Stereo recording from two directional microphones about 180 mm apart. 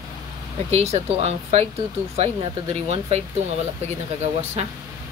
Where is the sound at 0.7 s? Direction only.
35° right (ahead or behind).